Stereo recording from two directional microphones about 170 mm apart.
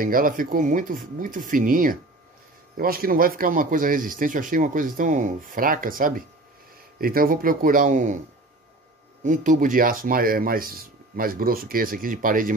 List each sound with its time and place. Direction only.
0.0 s speech: 55° right (ahead or behind)
9.2 s speech: 50° right (ahead or behind)